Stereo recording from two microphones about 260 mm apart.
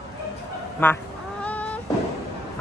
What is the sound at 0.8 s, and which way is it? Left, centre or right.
Speech, centre.